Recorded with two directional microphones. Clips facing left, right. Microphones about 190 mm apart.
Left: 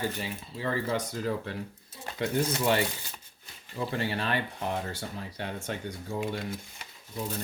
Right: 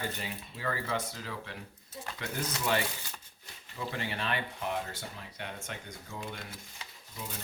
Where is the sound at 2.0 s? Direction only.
30° left (ahead or behind).